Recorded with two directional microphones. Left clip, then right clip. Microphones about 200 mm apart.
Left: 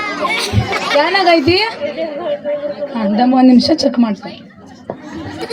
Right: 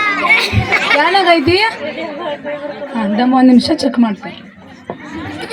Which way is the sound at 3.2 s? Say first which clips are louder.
Even; 30° right (ahead or behind).